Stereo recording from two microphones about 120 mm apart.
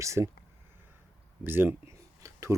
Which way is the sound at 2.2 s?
25° right (ahead or behind).